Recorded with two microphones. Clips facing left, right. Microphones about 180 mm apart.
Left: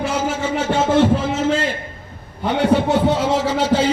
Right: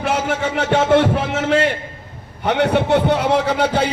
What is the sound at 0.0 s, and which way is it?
A man's voice, 60° right (ahead or behind).